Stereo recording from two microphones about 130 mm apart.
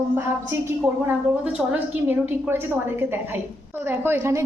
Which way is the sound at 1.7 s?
15° right (ahead or behind).